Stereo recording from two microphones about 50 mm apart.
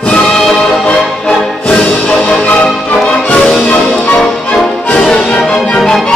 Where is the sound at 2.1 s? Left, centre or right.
Left.